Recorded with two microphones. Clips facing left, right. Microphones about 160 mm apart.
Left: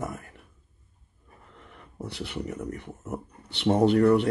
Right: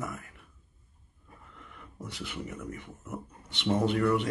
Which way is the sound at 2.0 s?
35° left (ahead or behind).